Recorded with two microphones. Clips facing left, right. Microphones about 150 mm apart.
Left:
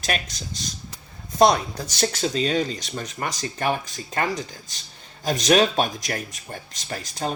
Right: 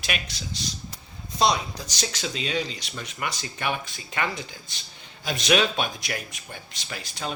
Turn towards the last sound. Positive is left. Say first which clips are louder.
# left 5 dB
turn(degrees=45)  # may be behind; listen again after turning